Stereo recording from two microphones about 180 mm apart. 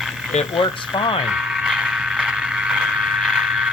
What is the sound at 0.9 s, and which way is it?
Speech, 25° left (ahead or behind).